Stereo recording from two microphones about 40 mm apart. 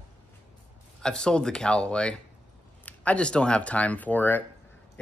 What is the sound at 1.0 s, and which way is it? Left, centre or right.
Speech, left.